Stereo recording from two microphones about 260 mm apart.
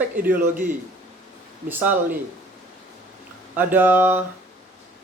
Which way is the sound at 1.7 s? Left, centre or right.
Centre.